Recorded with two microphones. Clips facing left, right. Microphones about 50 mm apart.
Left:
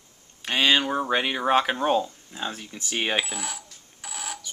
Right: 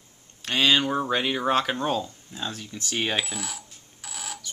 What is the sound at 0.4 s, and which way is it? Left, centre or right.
Speech, centre.